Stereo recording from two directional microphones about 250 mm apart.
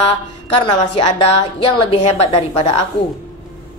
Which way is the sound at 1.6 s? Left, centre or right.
Left.